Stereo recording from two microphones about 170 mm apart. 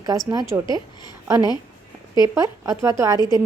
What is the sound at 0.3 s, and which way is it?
Speech, 20° right (ahead or behind).